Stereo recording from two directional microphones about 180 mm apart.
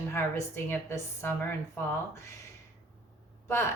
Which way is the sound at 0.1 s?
15° left (ahead or behind).